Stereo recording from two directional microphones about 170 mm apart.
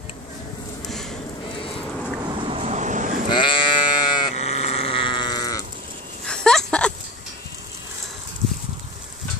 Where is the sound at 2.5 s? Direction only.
40° right (ahead or behind).